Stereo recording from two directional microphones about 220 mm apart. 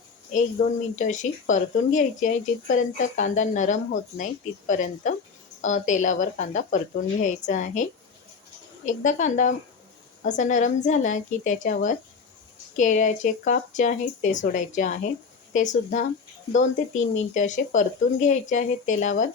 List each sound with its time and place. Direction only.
0.6 s speech: 35° left (ahead or behind)
8.9 s speech: 35° left (ahead or behind)